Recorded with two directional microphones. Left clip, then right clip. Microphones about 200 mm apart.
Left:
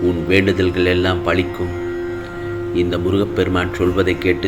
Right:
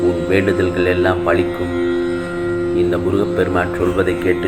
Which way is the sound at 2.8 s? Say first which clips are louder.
Left 1 dB; 40° left (ahead or behind).